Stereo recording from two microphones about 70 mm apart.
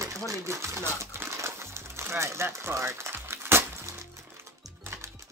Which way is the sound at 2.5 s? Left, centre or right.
Right.